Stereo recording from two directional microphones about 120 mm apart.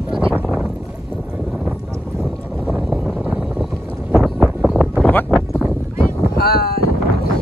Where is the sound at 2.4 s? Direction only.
10° right (ahead or behind).